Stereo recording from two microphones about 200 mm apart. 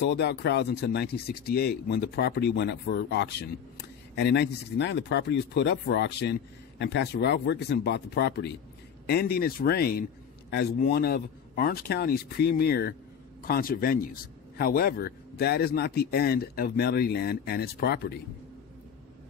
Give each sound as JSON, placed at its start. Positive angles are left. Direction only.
{"t": 0.0, "sound": "a man's voice", "side_deg": 60}